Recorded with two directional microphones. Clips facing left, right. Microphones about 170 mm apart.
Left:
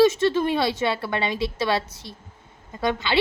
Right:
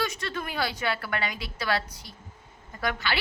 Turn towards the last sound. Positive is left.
turn(degrees=20)  # may be behind; listen again after turning